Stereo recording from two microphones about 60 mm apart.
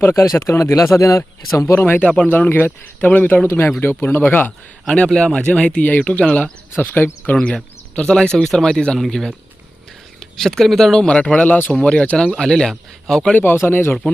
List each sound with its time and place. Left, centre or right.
0.0 s speech: left
1.6 s speech: left
2.0 s speech: centre
2.5 s speech: left
3.4 s speech: left
4.9 s speech: centre
6.8 s speech: left
7.3 s speech: centre
11.7 s speech: centre
13.4 s speech: left